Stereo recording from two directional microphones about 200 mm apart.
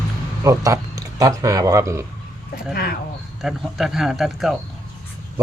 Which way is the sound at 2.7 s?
50° left (ahead or behind).